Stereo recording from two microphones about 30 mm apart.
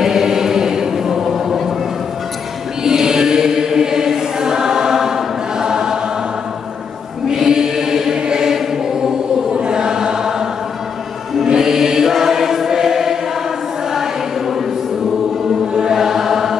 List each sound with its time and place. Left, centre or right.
0.0 s chant: centre
2.8 s chant: centre
7.3 s chant: centre
8.9 s choir: centre
9.6 s chant: right
11.4 s choir: right
15.9 s chant: centre